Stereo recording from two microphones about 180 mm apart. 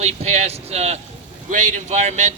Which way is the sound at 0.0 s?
35° right (ahead or behind).